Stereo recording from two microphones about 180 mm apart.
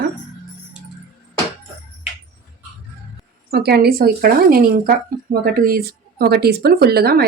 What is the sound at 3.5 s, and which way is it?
Speech, 60° right (ahead or behind).